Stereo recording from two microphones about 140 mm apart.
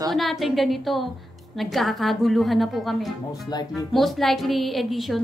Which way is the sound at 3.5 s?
30° left (ahead or behind).